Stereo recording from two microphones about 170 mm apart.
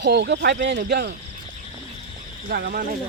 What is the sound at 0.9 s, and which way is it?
Speech, 75° right (ahead or behind).